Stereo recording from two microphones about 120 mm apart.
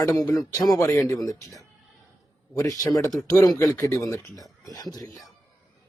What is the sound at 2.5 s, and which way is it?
A man's voice, 30° left (ahead or behind).